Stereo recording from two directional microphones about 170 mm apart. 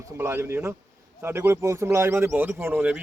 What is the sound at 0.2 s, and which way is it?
Speech, 15° right (ahead or behind).